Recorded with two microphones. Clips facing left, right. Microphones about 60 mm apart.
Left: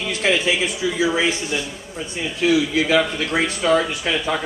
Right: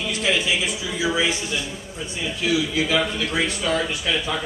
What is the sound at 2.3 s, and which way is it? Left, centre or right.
A woman's voice, left.